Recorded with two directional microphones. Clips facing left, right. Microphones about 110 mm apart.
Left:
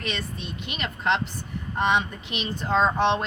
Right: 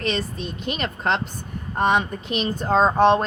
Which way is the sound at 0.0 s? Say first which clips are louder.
Right 6 dB; 35° right (ahead or behind).